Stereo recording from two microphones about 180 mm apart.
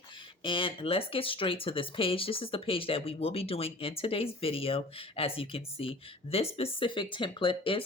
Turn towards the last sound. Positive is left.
turn(degrees=30)  # may be behind; listen again after turning